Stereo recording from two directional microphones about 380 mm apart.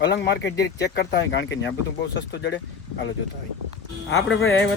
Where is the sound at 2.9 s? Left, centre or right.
Left.